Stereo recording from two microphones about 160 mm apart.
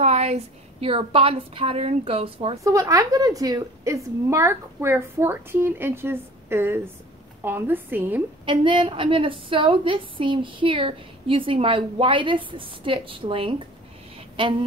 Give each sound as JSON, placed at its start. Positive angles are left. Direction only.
{"t": 0.0, "sound": "a woman's voice", "side_deg": -45}
{"t": 2.6, "sound": "a woman's voice", "side_deg": -20}
{"t": 8.5, "sound": "a woman's voice", "side_deg": -30}